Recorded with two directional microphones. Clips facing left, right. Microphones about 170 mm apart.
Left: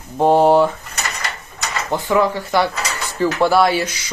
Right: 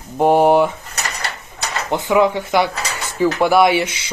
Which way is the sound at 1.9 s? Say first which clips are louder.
Right 2 dB; 20° right (ahead or behind).